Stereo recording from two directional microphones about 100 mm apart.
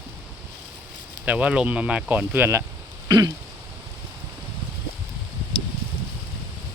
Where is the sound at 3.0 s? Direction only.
40° right (ahead or behind).